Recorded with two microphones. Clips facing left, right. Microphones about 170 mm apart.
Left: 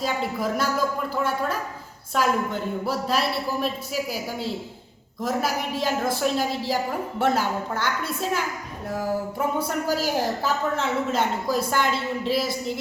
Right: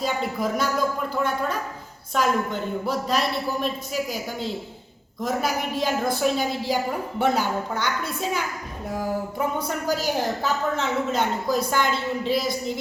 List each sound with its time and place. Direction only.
0.0 s a woman's voice: centre (ahead or behind)